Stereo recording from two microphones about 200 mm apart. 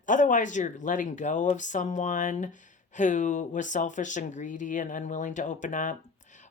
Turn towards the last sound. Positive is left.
turn(degrees=40)  # may be behind; listen again after turning